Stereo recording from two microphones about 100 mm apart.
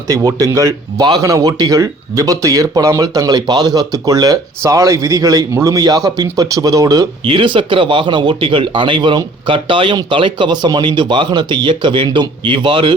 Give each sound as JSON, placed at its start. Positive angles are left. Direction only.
{"t": 0.1, "sound": "speech", "side_deg": -35}
{"t": 7.3, "sound": "speech", "side_deg": -55}